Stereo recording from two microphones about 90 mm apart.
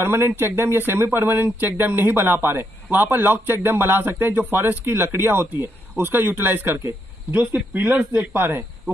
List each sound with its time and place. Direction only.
0.0 s speech: 25° right (ahead or behind)